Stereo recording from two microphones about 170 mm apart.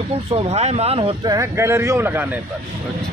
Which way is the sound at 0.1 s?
35° right (ahead or behind).